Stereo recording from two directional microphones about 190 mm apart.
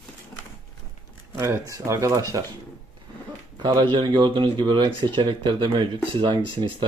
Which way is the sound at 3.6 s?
25° right (ahead or behind).